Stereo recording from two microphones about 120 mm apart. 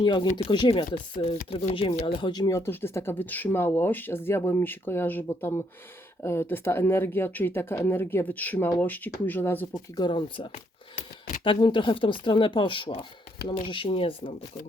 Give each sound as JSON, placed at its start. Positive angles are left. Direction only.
{"t": 0.0, "sound": "speech", "side_deg": 40}
{"t": 9.7, "sound": "speech", "side_deg": 35}